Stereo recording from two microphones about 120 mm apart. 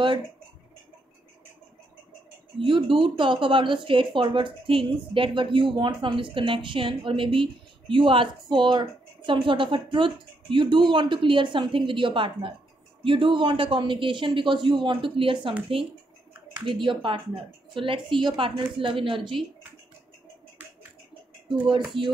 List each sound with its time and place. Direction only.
2.5 s speech: 45° right (ahead or behind)
16.6 s speech: 45° right (ahead or behind)
22.0 s speech: 45° right (ahead or behind)